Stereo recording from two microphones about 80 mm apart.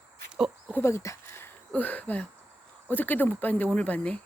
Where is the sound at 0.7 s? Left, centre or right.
Left.